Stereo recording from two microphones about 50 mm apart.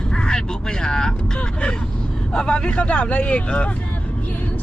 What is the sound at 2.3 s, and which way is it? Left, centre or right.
Speech, centre.